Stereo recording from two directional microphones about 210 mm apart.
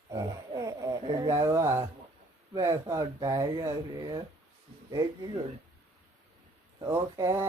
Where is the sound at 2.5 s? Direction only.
15° right (ahead or behind).